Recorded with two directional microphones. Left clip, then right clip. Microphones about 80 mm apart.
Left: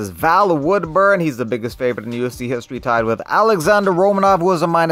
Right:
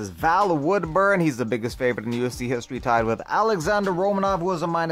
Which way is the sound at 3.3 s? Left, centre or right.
Left.